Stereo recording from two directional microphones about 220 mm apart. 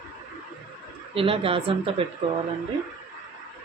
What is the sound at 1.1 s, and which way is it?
Speech, 25° right (ahead or behind).